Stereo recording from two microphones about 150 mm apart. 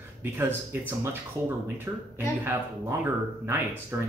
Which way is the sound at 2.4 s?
15° right (ahead or behind).